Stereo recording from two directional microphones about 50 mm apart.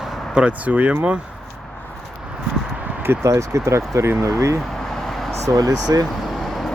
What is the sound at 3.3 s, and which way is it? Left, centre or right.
Speech, right.